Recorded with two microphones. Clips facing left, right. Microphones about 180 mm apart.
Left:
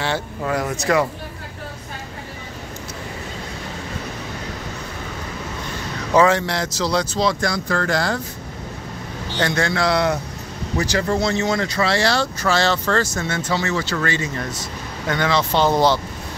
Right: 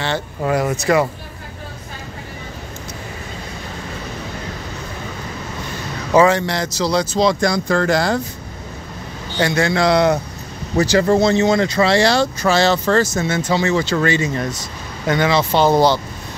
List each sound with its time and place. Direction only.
0.5 s speech: 10° right (ahead or behind)
6.1 s speech: centre (ahead or behind)
7.2 s speech: 20° right (ahead or behind)
9.4 s speech: 5° right (ahead or behind)
9.7 s a man's voice: 20° right (ahead or behind)
13.7 s speech: 20° right (ahead or behind); by 16.0 s 5° right (ahead or behind)